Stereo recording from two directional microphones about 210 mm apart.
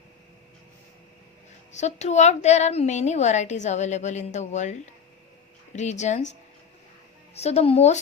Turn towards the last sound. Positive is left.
turn(degrees=30)  # may be behind; listen again after turning